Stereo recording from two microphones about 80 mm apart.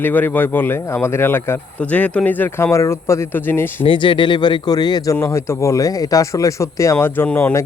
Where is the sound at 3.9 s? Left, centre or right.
Left.